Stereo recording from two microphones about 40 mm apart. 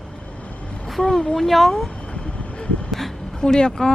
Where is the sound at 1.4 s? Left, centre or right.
Centre.